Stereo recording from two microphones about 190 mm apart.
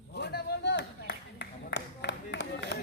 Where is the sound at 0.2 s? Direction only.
60° left (ahead or behind).